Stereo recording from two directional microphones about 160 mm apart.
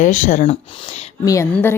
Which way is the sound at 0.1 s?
50° left (ahead or behind).